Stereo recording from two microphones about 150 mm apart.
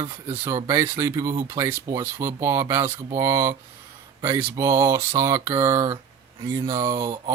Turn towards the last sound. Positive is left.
turn(degrees=-25)  # may be behind; listen again after turning